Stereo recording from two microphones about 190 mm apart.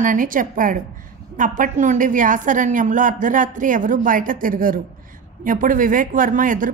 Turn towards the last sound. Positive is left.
turn(degrees=-45)  # may be behind; listen again after turning